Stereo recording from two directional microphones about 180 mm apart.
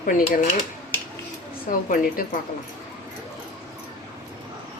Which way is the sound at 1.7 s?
50° left (ahead or behind).